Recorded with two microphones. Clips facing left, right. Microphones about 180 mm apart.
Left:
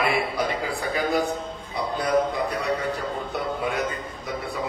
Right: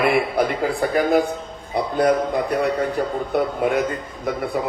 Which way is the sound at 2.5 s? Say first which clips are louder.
Right 6 dB; 55° right (ahead or behind).